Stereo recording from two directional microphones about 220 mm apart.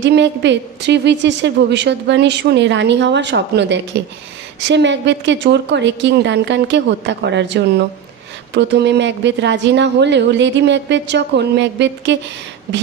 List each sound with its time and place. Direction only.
0.0 s a woman's voice: 55° right (ahead or behind)